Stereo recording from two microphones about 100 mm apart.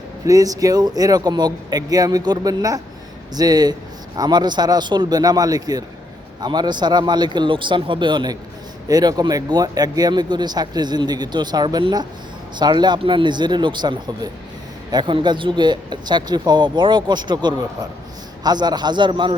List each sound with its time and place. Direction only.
0.3 s speech: 35° right (ahead or behind)